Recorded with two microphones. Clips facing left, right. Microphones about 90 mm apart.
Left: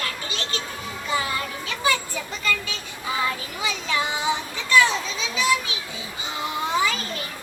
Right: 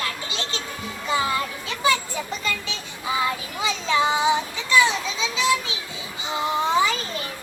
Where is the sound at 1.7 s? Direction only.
20° right (ahead or behind).